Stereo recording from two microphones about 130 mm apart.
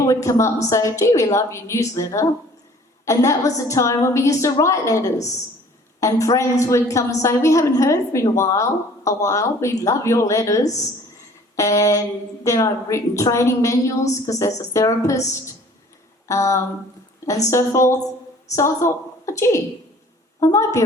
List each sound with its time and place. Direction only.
0.0 s a woman's voice: 25° left (ahead or behind)
16.2 s a sound: 25° left (ahead or behind)
17.2 s a woman's voice: 25° left (ahead or behind)